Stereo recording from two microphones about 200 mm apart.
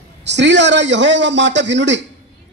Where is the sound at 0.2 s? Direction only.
60° right (ahead or behind).